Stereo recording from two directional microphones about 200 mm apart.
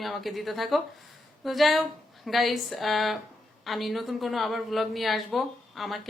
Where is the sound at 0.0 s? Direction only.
Centre (ahead or behind).